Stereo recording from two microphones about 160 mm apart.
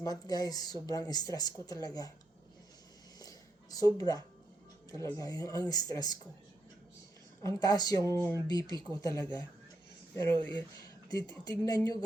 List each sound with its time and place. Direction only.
0.0 s speech: 25° left (ahead or behind)
3.2 s a sound: 25° left (ahead or behind)
4.9 s speech: 20° left (ahead or behind)
7.4 s speech: 25° left (ahead or behind)